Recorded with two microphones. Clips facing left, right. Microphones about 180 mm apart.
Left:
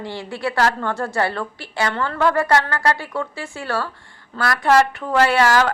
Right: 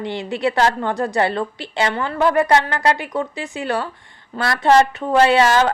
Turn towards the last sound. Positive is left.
turn(degrees=-20)  # may be behind; listen again after turning